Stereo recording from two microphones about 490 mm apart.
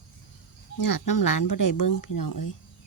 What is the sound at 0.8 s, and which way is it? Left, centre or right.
Speech, left.